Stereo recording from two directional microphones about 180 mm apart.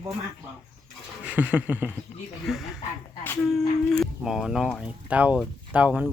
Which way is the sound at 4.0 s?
Centre (ahead or behind).